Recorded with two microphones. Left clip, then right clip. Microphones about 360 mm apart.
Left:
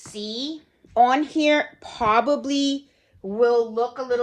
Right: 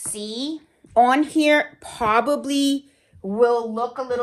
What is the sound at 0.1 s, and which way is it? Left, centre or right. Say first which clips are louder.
A woman's voice: right 1 dB; centre.